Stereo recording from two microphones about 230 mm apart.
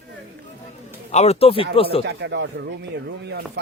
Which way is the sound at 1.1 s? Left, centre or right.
Left.